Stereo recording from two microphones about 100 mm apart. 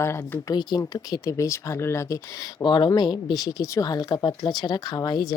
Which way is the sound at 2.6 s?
50° left (ahead or behind).